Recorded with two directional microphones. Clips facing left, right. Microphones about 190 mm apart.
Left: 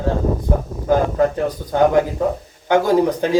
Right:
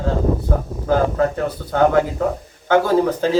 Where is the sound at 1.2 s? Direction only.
15° left (ahead or behind).